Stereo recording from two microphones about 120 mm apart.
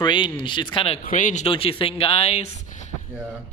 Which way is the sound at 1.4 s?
50° left (ahead or behind).